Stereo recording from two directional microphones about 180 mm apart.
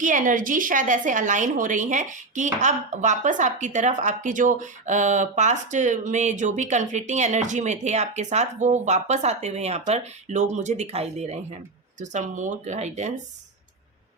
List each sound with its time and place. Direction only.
0.0 s a woman's voice: 45° right (ahead or behind)